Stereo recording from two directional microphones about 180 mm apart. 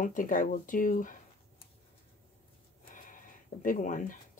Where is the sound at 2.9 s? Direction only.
45° left (ahead or behind).